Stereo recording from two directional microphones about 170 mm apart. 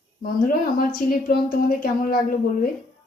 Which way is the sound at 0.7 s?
55° left (ahead or behind).